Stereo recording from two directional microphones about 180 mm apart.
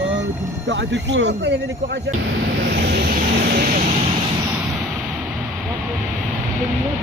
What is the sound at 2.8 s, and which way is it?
Vehicle, 60° right (ahead or behind).